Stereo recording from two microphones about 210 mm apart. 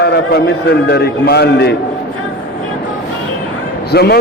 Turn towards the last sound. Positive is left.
turn(degrees=50)  # may be behind; listen again after turning